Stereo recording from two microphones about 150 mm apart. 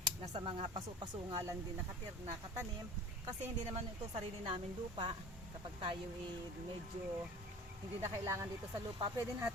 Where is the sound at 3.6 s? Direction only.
45° right (ahead or behind).